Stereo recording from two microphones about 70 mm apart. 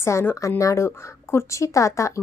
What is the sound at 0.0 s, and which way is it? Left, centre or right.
A woman's voice, left.